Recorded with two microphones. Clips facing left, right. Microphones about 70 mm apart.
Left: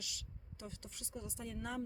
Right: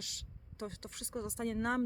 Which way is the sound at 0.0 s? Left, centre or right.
Right.